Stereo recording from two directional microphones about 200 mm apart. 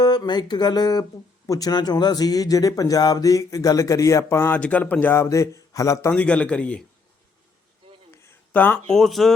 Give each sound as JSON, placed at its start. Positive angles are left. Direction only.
{"t": 0.0, "sound": "speech", "side_deg": 20}
{"t": 8.1, "sound": "speech", "side_deg": 10}